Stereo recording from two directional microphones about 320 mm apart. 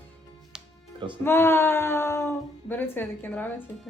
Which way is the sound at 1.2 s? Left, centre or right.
Centre.